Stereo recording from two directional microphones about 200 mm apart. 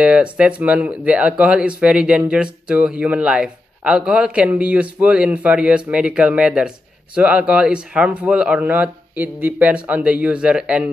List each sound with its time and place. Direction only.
0.0 s speech: 5° right (ahead or behind)